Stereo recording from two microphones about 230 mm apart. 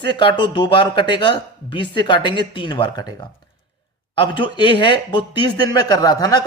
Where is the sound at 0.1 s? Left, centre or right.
Left.